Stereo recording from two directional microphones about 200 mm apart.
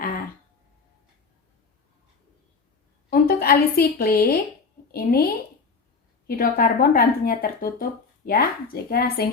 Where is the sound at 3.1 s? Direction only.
50° left (ahead or behind).